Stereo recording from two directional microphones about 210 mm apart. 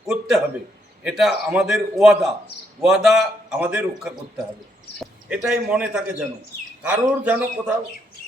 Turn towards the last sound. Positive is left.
turn(degrees=-5)  # may be behind; listen again after turning